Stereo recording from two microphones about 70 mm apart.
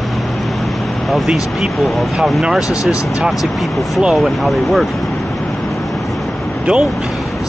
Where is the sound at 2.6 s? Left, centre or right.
Left.